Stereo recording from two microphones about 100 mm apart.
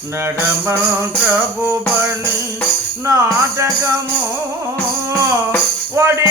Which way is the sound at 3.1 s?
30° right (ahead or behind).